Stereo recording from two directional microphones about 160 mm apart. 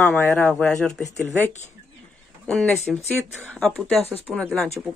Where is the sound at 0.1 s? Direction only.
10° left (ahead or behind).